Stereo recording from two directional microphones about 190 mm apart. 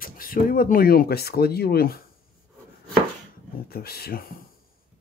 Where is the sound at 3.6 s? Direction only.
55° left (ahead or behind).